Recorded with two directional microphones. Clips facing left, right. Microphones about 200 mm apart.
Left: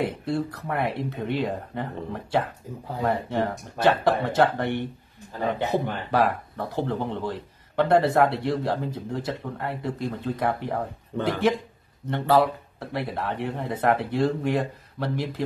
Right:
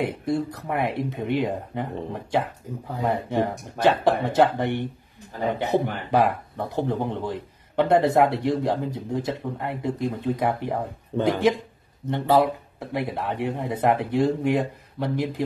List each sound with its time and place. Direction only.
0.0 s speech: 15° right (ahead or behind)
3.0 s speech: 15° right (ahead or behind)